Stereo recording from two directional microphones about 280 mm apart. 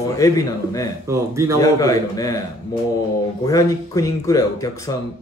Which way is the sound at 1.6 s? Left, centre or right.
Centre.